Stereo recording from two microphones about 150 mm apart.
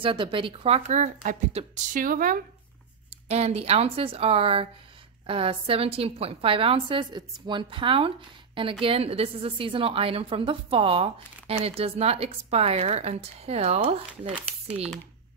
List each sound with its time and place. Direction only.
0.0 s speech: 35° right (ahead or behind)
2.0 s speech: 65° right (ahead or behind)
3.3 s a woman's voice: 45° right (ahead or behind)
14.7 s speech: 10° right (ahead or behind)